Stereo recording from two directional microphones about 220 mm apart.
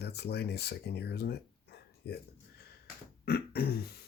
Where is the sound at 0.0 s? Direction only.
50° left (ahead or behind).